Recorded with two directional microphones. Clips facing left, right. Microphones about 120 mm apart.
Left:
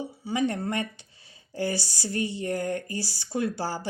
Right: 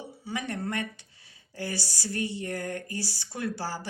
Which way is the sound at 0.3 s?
20° left (ahead or behind).